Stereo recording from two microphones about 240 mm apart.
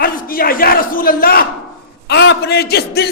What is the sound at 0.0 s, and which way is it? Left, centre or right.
A man's voice, left.